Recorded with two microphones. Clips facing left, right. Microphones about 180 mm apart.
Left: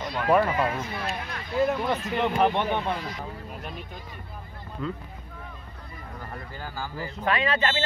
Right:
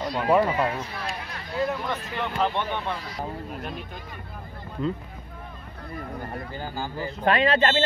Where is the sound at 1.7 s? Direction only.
15° left (ahead or behind).